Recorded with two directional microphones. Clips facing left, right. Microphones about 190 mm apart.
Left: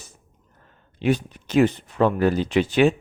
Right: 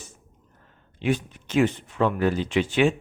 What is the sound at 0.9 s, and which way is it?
Speech, 35° left (ahead or behind).